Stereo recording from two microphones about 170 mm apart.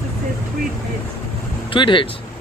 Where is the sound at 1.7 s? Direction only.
30° left (ahead or behind).